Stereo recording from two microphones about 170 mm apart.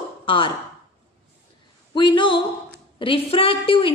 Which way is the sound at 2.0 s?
30° left (ahead or behind).